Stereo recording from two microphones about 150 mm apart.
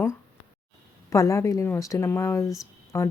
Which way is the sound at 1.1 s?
20° left (ahead or behind).